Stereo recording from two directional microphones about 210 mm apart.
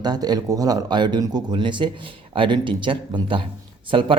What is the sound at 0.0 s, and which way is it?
A man's voice, 20° right (ahead or behind).